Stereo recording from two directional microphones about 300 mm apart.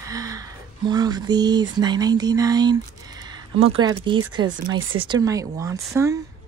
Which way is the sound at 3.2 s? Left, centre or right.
Centre.